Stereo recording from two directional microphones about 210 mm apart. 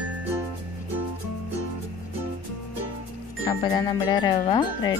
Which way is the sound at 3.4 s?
20° left (ahead or behind).